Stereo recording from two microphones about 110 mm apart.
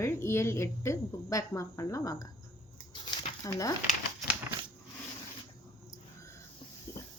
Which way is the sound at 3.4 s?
30° left (ahead or behind).